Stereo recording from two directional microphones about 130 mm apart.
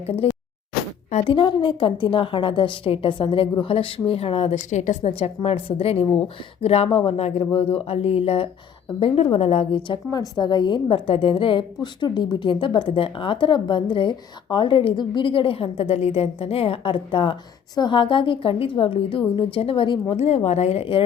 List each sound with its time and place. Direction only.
0.0 s a woman's voice: 55° left (ahead or behind)
1.2 s a woman's voice: 40° left (ahead or behind)
20.2 s speech: 55° left (ahead or behind)